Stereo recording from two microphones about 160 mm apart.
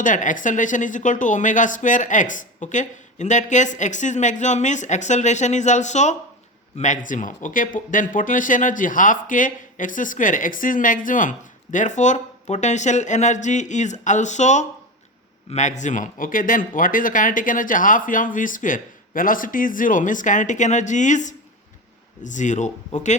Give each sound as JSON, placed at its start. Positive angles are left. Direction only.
{"t": 0.0, "sound": "speech", "side_deg": 55}